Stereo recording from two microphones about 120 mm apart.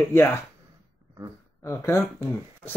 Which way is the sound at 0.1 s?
20° left (ahead or behind).